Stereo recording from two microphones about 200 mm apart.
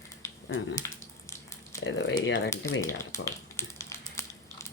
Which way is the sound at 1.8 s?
70° left (ahead or behind).